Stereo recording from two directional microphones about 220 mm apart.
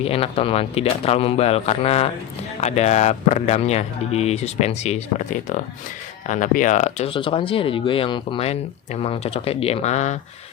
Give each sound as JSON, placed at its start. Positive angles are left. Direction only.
{"t": 0.0, "sound": "speech", "side_deg": 25}
{"t": 6.2, "sound": "speech", "side_deg": 35}